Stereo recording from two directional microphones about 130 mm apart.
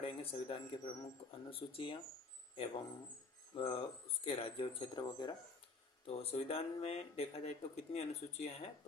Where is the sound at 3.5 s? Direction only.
45° left (ahead or behind).